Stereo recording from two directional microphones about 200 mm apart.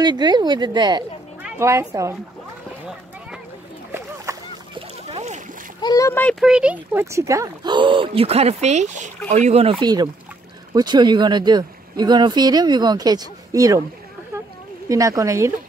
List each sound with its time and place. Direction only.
0.0 s speech: 20° right (ahead or behind)
4.3 s boat: 15° right (ahead or behind)
4.7 s splash: 30° right (ahead or behind)
5.8 s a child's voice: 20° left (ahead or behind)
6.4 s speech: 5° right (ahead or behind)
14.9 s speech: 15° right (ahead or behind)